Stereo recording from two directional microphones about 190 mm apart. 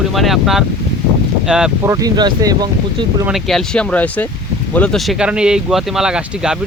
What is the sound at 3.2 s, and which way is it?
Speech, centre (ahead or behind).